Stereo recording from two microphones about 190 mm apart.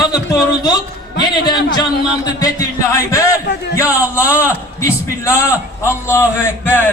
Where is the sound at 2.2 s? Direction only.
20° left (ahead or behind).